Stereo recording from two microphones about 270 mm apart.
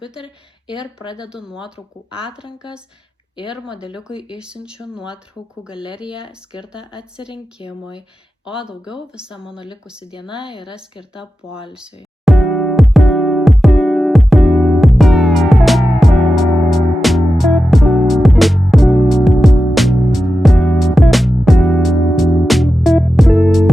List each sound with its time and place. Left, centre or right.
0.8 s speech: centre
3.5 s speech: centre
5.7 s speech: centre
6.2 s speech: centre
8.6 s speech: centre
10.1 s speech: centre
11.1 s speech: centre
11.7 s music: centre